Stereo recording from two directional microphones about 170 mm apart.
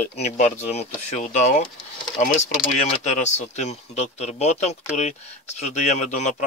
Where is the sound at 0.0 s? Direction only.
40° left (ahead or behind).